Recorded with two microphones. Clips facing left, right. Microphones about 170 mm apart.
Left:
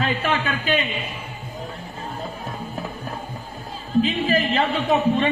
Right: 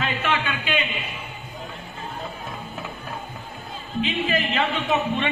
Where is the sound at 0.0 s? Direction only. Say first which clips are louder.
Left 2 dB; 40° left (ahead or behind).